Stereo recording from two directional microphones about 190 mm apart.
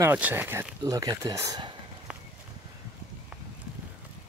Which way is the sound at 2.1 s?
5° right (ahead or behind).